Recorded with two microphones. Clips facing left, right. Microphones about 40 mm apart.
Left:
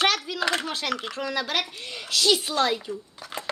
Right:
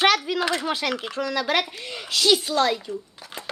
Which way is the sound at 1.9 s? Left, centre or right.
Right.